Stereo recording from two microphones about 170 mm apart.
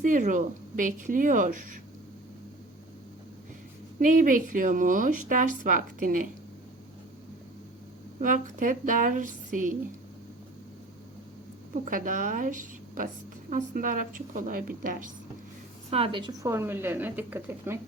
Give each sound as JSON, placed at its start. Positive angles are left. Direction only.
{"t": 0.0, "sound": "a woman's voice", "side_deg": -50}
{"t": 4.0, "sound": "a woman's voice", "side_deg": -50}
{"t": 8.2, "sound": "a woman's voice", "side_deg": -50}
{"t": 11.7, "sound": "a woman's voice", "side_deg": -55}
{"t": 15.9, "sound": "a woman's voice", "side_deg": -35}
{"t": 16.4, "sound": "speech", "side_deg": -15}